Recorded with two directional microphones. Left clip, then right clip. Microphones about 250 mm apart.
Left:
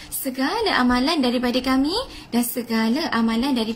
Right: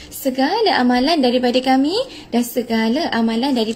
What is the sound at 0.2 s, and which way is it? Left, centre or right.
A woman's voice, centre.